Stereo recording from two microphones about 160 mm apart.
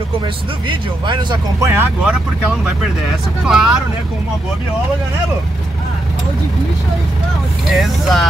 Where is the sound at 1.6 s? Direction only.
15° right (ahead or behind).